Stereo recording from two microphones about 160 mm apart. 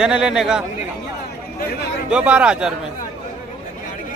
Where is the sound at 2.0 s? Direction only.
5° right (ahead or behind).